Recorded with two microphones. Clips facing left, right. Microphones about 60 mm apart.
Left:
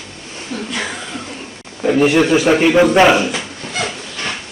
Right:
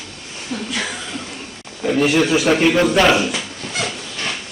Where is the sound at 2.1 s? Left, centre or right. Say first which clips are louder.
Left 2 dB; centre.